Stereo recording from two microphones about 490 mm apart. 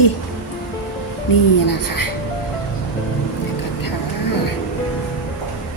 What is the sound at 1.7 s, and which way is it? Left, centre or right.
Speech, left.